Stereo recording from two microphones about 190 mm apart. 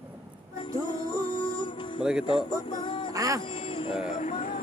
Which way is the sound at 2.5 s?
20° left (ahead or behind).